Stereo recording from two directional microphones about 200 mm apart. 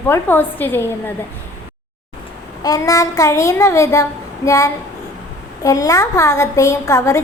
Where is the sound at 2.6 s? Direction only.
15° left (ahead or behind).